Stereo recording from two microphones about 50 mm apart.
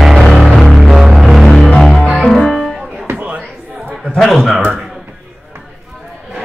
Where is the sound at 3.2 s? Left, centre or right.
Right.